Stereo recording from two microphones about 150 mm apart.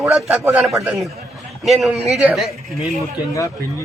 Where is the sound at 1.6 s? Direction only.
Centre (ahead or behind).